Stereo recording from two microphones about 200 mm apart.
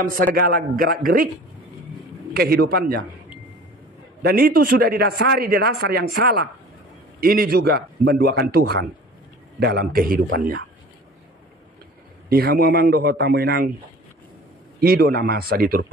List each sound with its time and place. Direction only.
0.0 s a man's voice: 45° right (ahead or behind)
2.3 s a man's voice: 50° right (ahead or behind)
4.2 s a man's voice: 50° right (ahead or behind)
12.3 s a man's voice: 50° right (ahead or behind)
14.8 s a man's voice: 50° right (ahead or behind)